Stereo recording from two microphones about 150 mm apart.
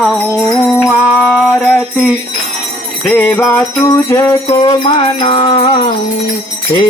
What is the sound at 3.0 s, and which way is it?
Jingle bell, 10° left (ahead or behind).